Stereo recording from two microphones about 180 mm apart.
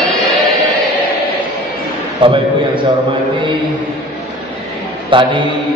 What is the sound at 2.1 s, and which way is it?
Speech, 30° right (ahead or behind).